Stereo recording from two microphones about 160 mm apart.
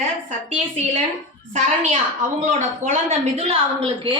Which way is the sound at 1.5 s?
50° right (ahead or behind).